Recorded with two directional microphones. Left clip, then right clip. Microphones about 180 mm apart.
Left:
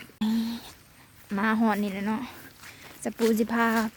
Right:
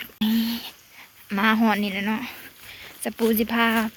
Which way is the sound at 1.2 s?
10° left (ahead or behind).